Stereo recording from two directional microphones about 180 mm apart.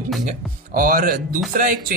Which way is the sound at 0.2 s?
50° right (ahead or behind).